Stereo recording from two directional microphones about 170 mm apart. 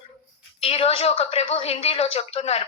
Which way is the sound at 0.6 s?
35° left (ahead or behind).